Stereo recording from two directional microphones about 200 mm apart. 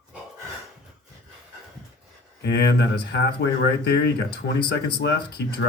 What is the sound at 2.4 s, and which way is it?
Speech, 55° left (ahead or behind).